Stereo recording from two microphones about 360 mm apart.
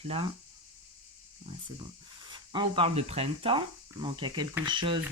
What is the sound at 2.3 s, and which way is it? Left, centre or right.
Speech, centre.